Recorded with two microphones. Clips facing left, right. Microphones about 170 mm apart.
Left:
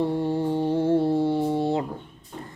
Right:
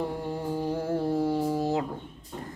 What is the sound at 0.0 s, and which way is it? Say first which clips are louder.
Mantra: left 7 dB; 30° left (ahead or behind).